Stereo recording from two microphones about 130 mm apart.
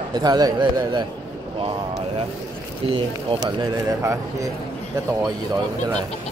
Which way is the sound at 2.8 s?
45° right (ahead or behind).